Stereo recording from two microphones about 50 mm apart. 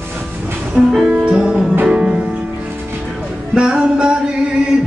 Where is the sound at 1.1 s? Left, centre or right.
Right.